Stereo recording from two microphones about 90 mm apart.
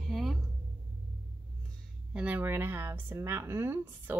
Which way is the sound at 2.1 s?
20° right (ahead or behind).